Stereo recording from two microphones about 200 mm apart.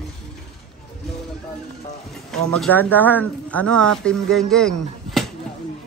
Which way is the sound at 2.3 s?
5° left (ahead or behind).